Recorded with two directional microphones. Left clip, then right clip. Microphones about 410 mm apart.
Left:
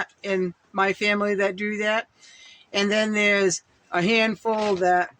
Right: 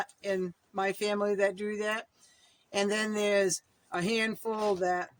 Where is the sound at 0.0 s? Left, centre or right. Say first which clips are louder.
Left 7 dB; right.